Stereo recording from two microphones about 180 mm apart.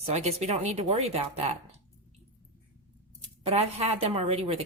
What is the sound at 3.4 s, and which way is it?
Speech, 35° right (ahead or behind).